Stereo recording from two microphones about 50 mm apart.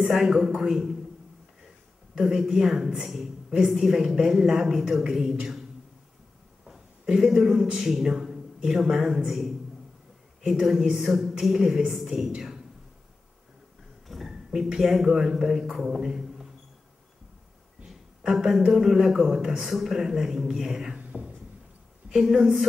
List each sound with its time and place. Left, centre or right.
0.0 s a man's voice: centre
2.1 s a man's voice: centre
6.7 s a man's voice: centre
10.6 s a woman's voice: centre
14.0 s a sound: centre
14.3 s speech: centre
18.2 s a man's voice: centre
21.0 s a sound: right
22.1 s a man's voice: centre